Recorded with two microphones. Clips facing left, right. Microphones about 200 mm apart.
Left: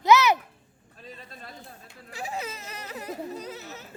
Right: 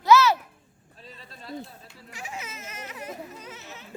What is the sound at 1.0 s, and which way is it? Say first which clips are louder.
Speech: left 2 dB; 50° left (ahead or behind).